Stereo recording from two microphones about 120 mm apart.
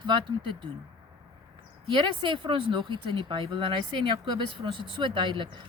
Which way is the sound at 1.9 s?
45° right (ahead or behind).